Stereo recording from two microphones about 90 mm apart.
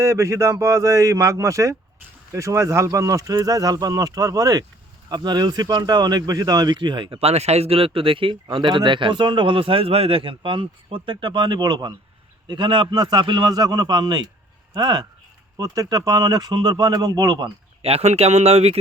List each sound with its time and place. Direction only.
0.0 s speech: 35° right (ahead or behind)
5.0 s speech: 55° right (ahead or behind)
7.7 s speech: 90° right; by 17.5 s 55° right (ahead or behind)